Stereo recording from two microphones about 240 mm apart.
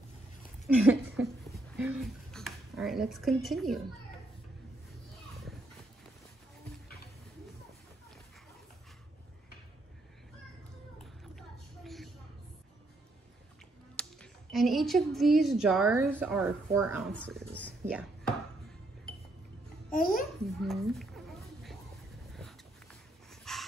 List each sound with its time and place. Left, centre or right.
0.7 s speech: centre
11.3 s a sound: centre
13.9 s a woman's voice: centre
17.1 s speech: centre
19.9 s babbling: left
20.6 s a sound: centre
22.3 s dog: centre